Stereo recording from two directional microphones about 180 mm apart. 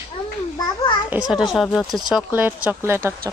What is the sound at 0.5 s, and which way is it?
Babbling, 25° left (ahead or behind).